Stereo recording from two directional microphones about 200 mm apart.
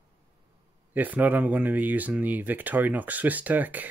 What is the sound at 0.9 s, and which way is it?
Speech, 10° right (ahead or behind).